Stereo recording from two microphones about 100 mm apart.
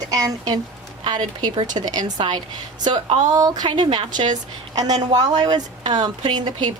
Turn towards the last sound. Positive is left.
turn(degrees=-50)  # may be behind; listen again after turning